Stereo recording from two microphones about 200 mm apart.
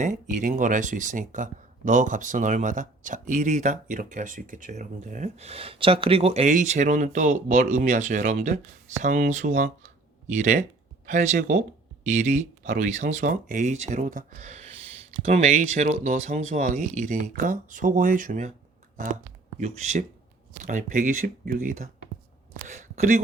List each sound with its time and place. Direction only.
0.0 s speech: 35° right (ahead or behind)
19.5 s speech: 35° right (ahead or behind)